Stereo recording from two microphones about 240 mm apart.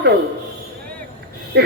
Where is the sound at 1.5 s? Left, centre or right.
Right.